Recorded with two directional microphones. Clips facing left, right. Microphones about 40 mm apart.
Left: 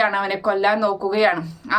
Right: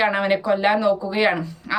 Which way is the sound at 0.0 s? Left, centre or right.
Right.